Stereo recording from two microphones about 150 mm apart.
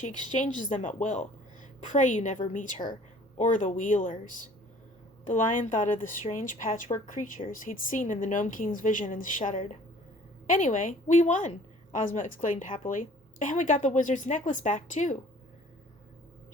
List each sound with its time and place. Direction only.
0.0 s speech: 55° left (ahead or behind)